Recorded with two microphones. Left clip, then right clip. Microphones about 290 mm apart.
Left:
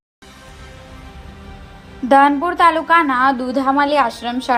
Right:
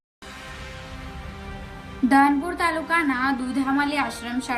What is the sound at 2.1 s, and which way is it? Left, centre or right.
A woman's voice, left.